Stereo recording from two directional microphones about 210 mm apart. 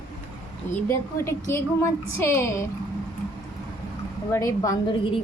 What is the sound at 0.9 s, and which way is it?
A woman's voice, 10° left (ahead or behind).